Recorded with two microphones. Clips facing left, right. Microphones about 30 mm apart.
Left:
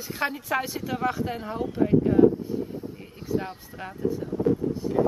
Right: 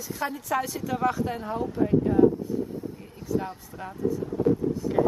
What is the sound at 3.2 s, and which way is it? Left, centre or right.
Speech, left.